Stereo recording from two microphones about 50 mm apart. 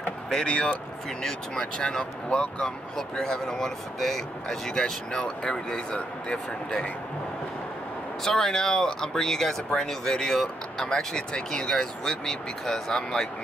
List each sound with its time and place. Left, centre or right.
0.3 s speech: centre
8.2 s speech: centre